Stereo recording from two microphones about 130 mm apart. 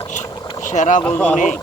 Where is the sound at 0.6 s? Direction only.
70° left (ahead or behind).